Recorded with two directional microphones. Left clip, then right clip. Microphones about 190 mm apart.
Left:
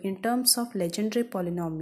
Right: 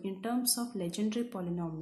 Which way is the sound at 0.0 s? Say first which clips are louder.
Left 8 dB; 35° left (ahead or behind).